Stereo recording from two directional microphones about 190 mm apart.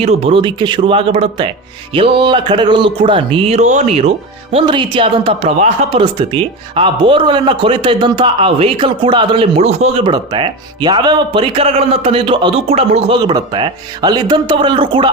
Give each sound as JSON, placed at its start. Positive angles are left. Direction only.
{"t": 0.0, "sound": "speech", "side_deg": -35}